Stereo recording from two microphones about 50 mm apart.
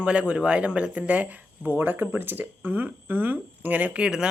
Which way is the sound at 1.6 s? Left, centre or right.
Right.